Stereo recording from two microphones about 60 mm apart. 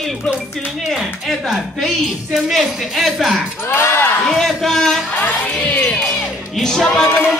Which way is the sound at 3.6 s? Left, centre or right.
Left.